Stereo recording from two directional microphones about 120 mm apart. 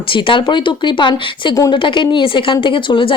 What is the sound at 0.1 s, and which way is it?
A woman's voice, 45° left (ahead or behind).